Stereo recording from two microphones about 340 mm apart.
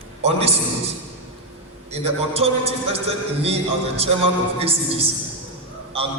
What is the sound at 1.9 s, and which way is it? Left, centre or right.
A man's voice, centre.